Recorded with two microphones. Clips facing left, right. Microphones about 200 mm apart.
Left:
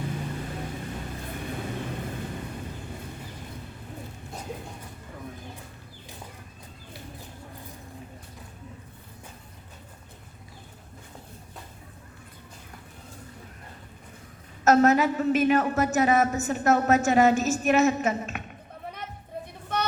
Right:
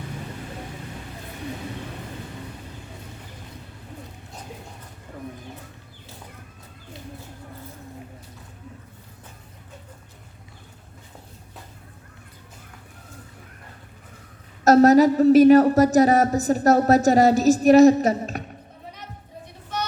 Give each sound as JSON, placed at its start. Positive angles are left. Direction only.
{"t": 14.6, "sound": "a woman's voice", "side_deg": -35}
{"t": 19.7, "sound": "vehicle", "side_deg": 55}